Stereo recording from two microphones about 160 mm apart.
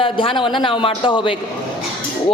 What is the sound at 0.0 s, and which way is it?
A man's voice, 30° left (ahead or behind).